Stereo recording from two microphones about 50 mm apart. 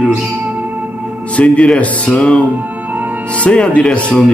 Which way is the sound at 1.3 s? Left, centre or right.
Left.